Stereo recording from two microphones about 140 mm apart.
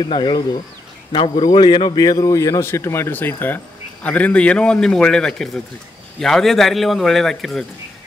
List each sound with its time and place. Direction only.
0.0 s speech: 35° left (ahead or behind)
2.0 s speech: 25° left (ahead or behind); by 7.6 s centre (ahead or behind)